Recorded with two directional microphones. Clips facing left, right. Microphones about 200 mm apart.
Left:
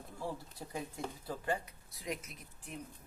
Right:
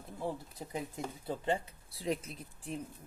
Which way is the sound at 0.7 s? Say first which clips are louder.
Right 2 dB; 25° right (ahead or behind).